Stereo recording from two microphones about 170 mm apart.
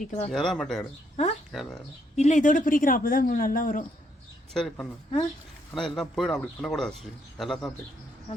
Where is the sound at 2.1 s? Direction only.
40° left (ahead or behind).